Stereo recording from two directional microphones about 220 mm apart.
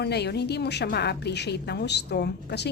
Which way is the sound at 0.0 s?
50° left (ahead or behind).